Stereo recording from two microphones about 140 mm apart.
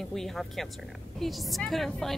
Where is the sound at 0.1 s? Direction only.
Centre (ahead or behind).